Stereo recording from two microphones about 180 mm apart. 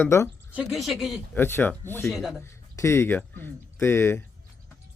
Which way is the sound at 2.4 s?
15° left (ahead or behind).